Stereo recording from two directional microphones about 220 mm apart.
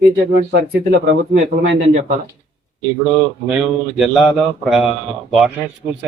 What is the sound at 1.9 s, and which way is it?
Speech, 30° right (ahead or behind).